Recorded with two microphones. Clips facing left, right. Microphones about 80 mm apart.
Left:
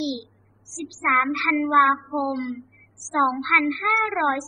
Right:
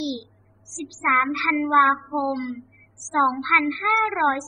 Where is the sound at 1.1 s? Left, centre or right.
Right.